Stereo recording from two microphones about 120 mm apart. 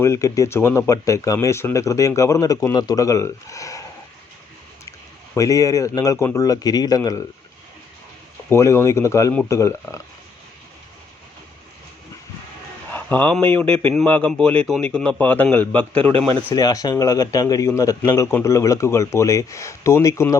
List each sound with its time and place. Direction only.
0.0 s speech: 25° left (ahead or behind)
4.9 s speech: 25° left (ahead or behind)
8.4 s speech: 25° left (ahead or behind)
12.9 s a sound: 15° left (ahead or behind)
13.3 s a man's voice: 10° left (ahead or behind)
16.6 s speech: 35° left (ahead or behind)